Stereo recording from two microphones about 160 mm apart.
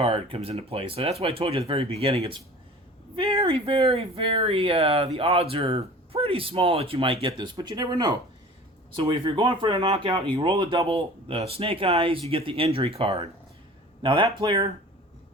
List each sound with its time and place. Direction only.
0.0 s speech: 35° right (ahead or behind)